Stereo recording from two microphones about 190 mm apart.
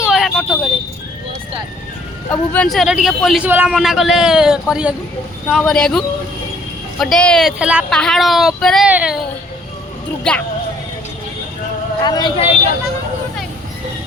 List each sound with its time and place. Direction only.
0.0 s a sound: centre (ahead or behind)
2.3 s speech: 10° left (ahead or behind)
2.7 s a man's voice: centre (ahead or behind)
10.3 s speech: 5° left (ahead or behind)
12.0 s speech: 20° left (ahead or behind)